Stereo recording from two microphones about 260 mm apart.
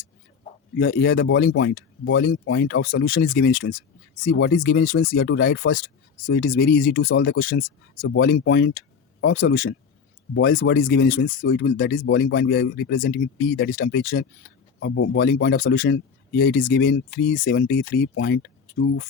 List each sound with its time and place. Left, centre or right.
0.8 s speech: left